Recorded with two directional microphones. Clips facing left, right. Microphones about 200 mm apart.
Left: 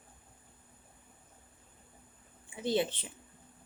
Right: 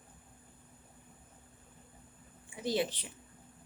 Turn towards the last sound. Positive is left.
turn(degrees=25)  # may be behind; listen again after turning